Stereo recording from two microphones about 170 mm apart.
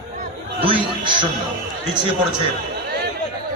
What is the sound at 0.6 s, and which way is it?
Speech, 30° right (ahead or behind).